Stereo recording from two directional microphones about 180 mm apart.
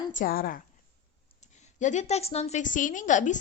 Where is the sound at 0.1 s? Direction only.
50° left (ahead or behind).